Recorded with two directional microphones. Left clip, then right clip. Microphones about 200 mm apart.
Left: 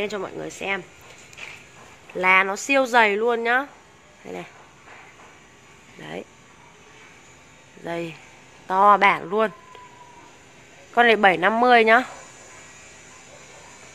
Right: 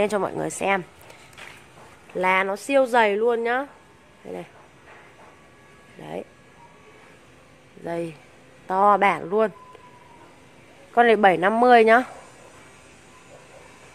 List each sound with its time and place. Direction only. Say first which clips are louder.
0.0 s speech: right 5 dB; 30° right (ahead or behind)
2.1 s speech: left 3 dB; 5° right (ahead or behind)
5.9 s speech: right 1 dB; 5° right (ahead or behind)
7.8 s speech: even; 5° right (ahead or behind)
11.0 s speech: even; 10° right (ahead or behind)